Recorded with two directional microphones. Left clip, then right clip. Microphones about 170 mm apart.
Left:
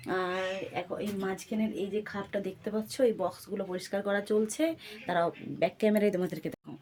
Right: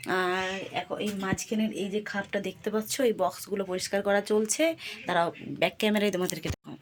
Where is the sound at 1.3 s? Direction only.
30° right (ahead or behind); by 6.2 s 5° left (ahead or behind).